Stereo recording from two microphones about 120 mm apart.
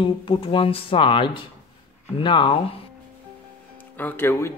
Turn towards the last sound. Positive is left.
turn(degrees=20)  # may be behind; listen again after turning